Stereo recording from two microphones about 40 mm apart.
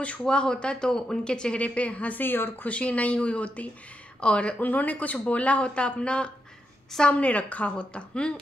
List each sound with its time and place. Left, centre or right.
0.2 s speech: left
1.6 s speech: left
2.1 s speech: left
2.6 s speech: left
4.6 s speech: left
7.2 s speech: left